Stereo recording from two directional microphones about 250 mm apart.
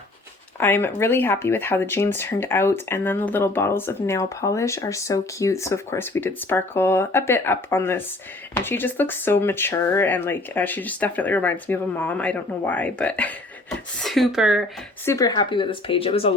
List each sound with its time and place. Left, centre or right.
0.6 s speech: centre
15.0 s speech: centre